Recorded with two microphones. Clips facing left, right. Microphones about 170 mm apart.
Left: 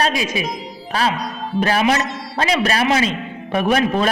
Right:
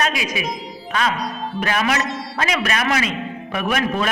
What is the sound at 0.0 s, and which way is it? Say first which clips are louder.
A man's voice: left 3 dB; 30° left (ahead or behind).